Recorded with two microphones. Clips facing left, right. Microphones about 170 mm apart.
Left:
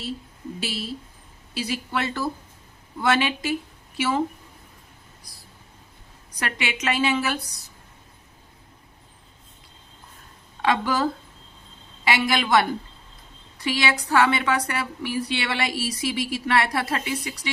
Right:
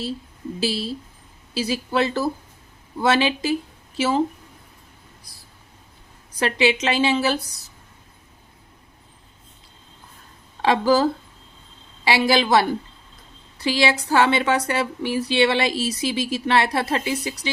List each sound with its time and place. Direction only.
0.6 s a woman's voice: 30° right (ahead or behind)
6.4 s speech: 30° right (ahead or behind)
10.6 s a woman's voice: 30° right (ahead or behind)
13.7 s speech: 25° right (ahead or behind)